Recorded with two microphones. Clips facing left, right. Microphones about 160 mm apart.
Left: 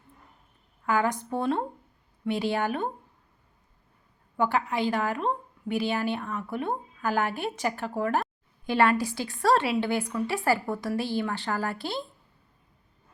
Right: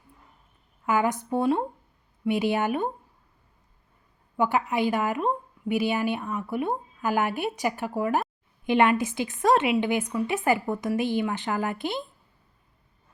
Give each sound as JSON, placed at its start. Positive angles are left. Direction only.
{"t": 0.9, "sound": "a woman's voice", "side_deg": -20}
{"t": 4.4, "sound": "a woman's voice", "side_deg": -15}